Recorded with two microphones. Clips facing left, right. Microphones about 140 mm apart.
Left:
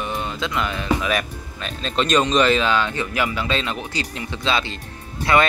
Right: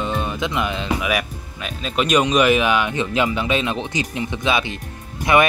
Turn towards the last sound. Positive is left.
turn(degrees=-20)  # may be behind; listen again after turning